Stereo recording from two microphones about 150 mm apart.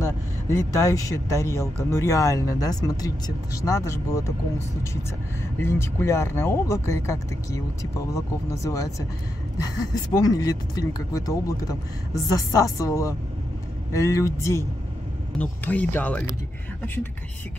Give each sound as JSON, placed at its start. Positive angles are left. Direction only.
{"t": 0.0, "sound": "speech", "side_deg": 20}
{"t": 10.1, "sound": "speech", "side_deg": 25}